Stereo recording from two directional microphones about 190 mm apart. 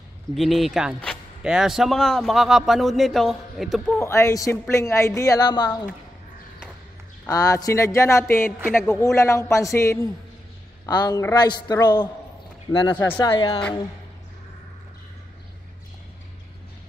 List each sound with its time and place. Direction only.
0.3 s speech: centre (ahead or behind)
4.0 s a woman's voice: 15° left (ahead or behind)
7.2 s a woman's voice: 20° left (ahead or behind)
13.2 s a man's voice: 20° left (ahead or behind)